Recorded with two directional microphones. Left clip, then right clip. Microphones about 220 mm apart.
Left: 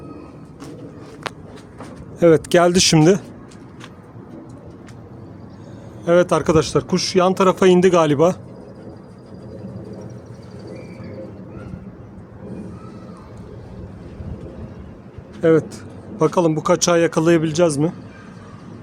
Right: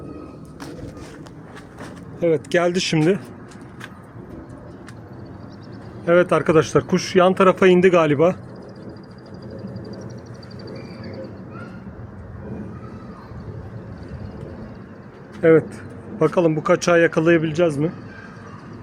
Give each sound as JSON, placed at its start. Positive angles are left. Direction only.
{"t": 2.1, "sound": "speech", "side_deg": 45}
{"t": 2.5, "sound": "speech", "side_deg": 30}
{"t": 6.1, "sound": "speech", "side_deg": 20}
{"t": 6.6, "sound": "speech", "side_deg": 0}
{"t": 15.4, "sound": "a sound", "side_deg": 10}
{"t": 16.3, "sound": "speech", "side_deg": 20}